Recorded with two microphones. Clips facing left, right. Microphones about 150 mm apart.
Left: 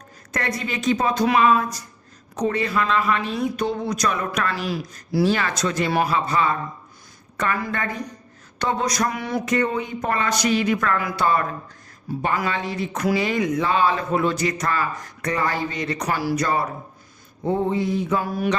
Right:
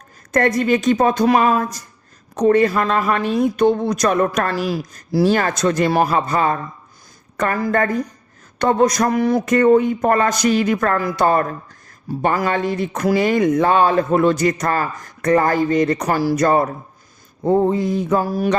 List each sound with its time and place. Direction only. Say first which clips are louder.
0.3 s speech: right 11 dB; 50° right (ahead or behind)